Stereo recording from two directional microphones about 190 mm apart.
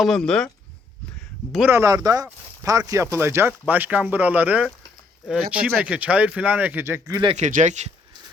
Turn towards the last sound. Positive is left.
turn(degrees=-40)  # may be behind; listen again after turning